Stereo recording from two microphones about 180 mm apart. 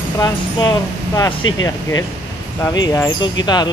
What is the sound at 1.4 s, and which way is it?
Speech, 90° left.